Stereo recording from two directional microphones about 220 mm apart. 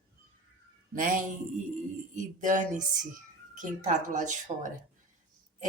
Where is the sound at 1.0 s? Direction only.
35° right (ahead or behind).